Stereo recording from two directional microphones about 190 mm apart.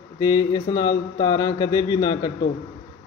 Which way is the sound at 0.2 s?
20° left (ahead or behind).